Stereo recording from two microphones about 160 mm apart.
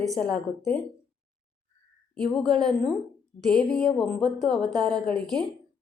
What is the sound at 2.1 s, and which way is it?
A woman's voice, 5° left (ahead or behind).